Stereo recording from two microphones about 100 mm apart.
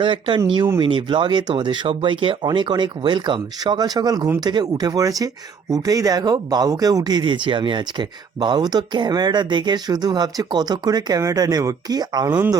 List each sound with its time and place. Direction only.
0.0 s speech: 55° right (ahead or behind); by 12.3 s 40° right (ahead or behind)